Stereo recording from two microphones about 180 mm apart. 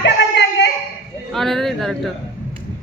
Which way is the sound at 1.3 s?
Centre (ahead or behind).